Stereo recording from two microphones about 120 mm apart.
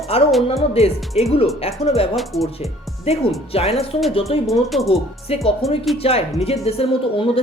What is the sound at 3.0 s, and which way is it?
Speech, 55° left (ahead or behind).